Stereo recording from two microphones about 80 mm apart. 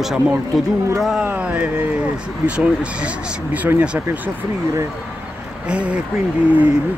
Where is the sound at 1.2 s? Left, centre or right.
Centre.